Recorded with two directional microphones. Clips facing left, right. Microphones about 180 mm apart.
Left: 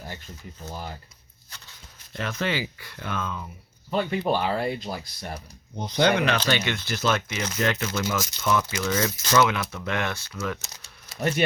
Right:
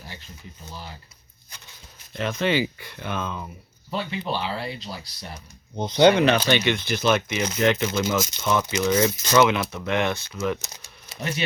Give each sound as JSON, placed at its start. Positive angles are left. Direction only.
{"t": 0.7, "sound": "speech", "side_deg": 50}
{"t": 1.5, "sound": "a sound", "side_deg": -15}
{"t": 2.2, "sound": "speech", "side_deg": -20}
{"t": 3.9, "sound": "speech", "side_deg": 50}
{"t": 5.8, "sound": "speech", "side_deg": -20}